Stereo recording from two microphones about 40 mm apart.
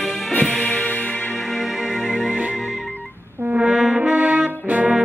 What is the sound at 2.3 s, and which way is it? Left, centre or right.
Music, right.